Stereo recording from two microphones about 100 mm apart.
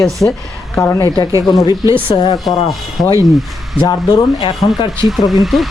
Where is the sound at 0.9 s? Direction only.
45° left (ahead or behind).